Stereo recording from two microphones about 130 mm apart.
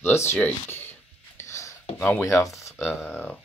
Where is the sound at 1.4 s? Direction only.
25° left (ahead or behind).